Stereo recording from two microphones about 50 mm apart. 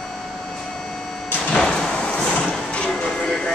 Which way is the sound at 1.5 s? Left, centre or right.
Centre.